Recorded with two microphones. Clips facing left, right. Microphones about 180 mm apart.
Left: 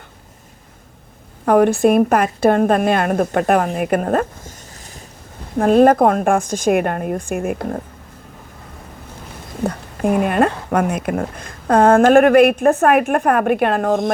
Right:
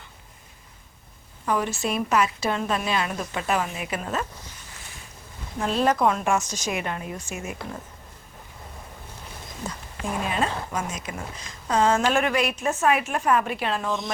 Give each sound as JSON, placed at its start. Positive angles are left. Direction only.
{"t": 1.5, "sound": "a woman's voice", "side_deg": 60}
{"t": 5.5, "sound": "a woman's voice", "side_deg": 55}
{"t": 9.6, "sound": "speech", "side_deg": 60}